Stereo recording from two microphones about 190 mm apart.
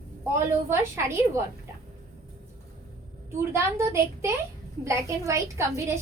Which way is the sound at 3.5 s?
15° right (ahead or behind).